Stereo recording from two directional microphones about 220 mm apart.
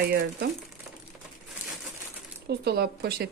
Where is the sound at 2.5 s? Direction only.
45° right (ahead or behind).